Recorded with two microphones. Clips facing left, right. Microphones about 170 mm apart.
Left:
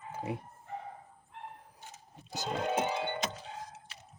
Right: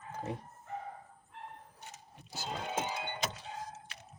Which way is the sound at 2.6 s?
60° left (ahead or behind).